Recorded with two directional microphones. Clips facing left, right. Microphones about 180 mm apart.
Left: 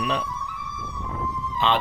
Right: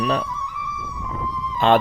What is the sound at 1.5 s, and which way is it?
Speech, 50° right (ahead or behind).